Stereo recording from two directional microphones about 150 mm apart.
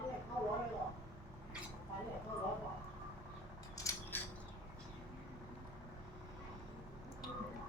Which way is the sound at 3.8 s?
25° left (ahead or behind).